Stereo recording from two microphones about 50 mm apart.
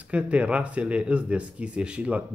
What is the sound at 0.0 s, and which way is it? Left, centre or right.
Speech, right.